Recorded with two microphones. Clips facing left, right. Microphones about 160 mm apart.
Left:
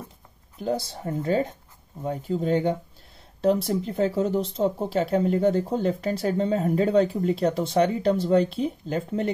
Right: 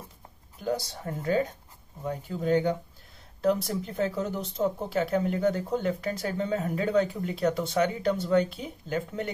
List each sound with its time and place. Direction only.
0.7 s speech: 30° left (ahead or behind)